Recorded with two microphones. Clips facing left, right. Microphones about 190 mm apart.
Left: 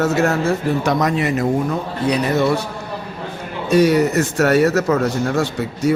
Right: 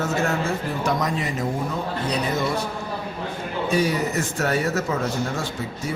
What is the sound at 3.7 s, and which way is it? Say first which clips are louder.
A man's voice: left 9 dB; 70° left (ahead or behind).